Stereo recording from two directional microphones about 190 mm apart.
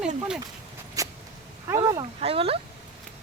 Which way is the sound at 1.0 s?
15° right (ahead or behind).